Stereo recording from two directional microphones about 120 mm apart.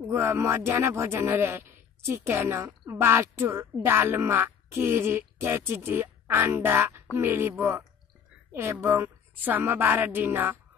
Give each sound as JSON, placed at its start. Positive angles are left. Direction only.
{"t": 0.1, "sound": "a woman's voice", "side_deg": -20}